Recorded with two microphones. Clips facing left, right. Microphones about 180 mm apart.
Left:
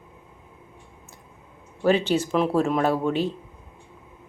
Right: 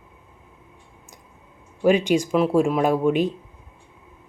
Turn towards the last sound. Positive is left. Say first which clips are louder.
# right 3 dB
turn(degrees=-15)  # may be behind; listen again after turning